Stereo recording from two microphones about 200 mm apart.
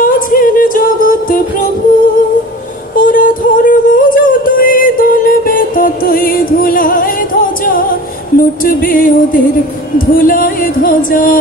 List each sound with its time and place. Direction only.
0.0 s music: 45° left (ahead or behind)
3.0 s music: 40° left (ahead or behind)
8.4 s speech: 45° left (ahead or behind)